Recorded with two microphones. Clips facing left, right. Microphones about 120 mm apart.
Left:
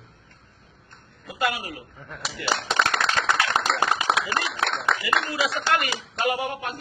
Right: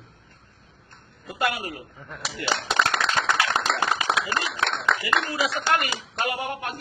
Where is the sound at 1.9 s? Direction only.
Centre (ahead or behind).